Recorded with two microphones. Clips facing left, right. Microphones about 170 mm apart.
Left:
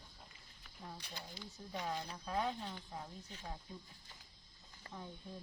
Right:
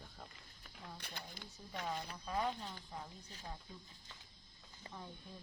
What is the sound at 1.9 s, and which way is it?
Speech, centre (ahead or behind).